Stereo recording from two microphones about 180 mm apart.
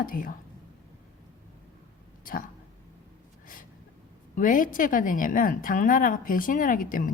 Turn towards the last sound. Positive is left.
turn(degrees=50)  # may be behind; listen again after turning